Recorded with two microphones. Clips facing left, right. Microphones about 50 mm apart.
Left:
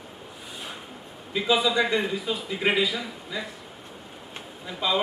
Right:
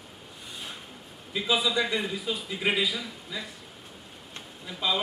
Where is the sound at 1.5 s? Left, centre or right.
Centre.